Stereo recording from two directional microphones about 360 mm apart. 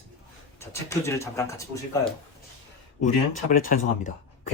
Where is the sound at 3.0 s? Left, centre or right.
Left.